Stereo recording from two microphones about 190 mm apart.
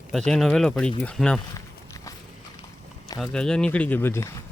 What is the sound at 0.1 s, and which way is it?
Speech, centre (ahead or behind).